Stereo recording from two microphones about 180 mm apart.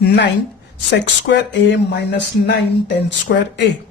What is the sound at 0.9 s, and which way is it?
Speech, 75° left (ahead or behind).